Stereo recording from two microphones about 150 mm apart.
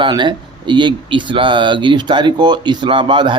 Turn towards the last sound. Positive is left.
turn(degrees=-35)  # may be behind; listen again after turning